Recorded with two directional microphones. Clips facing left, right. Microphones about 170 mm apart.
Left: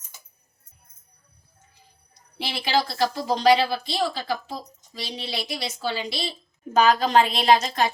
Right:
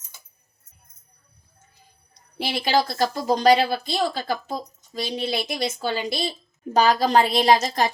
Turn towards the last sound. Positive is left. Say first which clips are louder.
# right 1 dB
turn(degrees=-40)  # may be behind; listen again after turning